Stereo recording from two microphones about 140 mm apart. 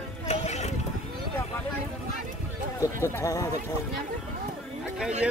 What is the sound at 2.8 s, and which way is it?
Speech, 20° left (ahead or behind).